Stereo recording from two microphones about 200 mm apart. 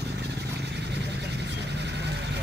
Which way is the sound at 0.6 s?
60° right (ahead or behind).